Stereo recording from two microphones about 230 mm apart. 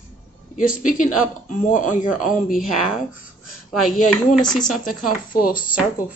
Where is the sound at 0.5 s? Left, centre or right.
Left.